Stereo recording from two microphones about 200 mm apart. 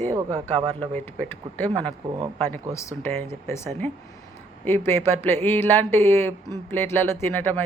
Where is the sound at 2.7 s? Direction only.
10° left (ahead or behind).